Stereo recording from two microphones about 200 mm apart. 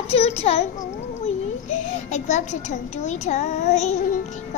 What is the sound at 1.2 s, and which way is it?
A child's voice, 35° left (ahead or behind).